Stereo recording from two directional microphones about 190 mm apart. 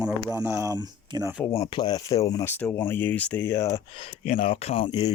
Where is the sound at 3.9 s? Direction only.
30° left (ahead or behind).